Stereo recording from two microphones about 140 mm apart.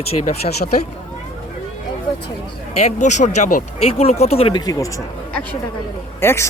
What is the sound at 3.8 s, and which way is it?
Speech, 45° left (ahead or behind).